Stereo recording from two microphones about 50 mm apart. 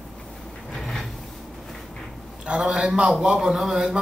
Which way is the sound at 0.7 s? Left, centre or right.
Centre.